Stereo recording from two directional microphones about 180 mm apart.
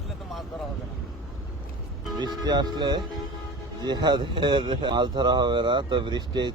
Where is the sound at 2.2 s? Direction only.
25° right (ahead or behind).